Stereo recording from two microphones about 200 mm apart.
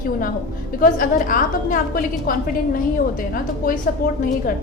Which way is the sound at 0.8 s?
45° left (ahead or behind).